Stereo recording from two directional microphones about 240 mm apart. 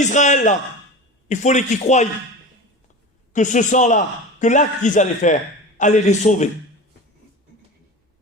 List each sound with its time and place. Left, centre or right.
0.0 s speech: left
3.3 s a man's voice: left